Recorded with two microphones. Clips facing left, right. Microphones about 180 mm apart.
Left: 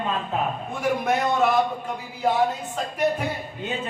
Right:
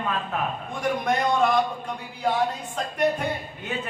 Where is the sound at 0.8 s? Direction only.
5° left (ahead or behind).